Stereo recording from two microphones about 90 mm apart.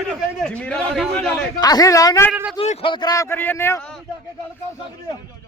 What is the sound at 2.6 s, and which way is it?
Speech, 80° left.